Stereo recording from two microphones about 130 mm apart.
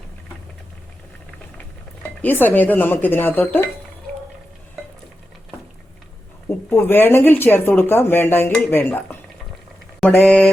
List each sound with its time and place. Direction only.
2.0 s speech: 15° left (ahead or behind)
6.5 s speech: 20° left (ahead or behind)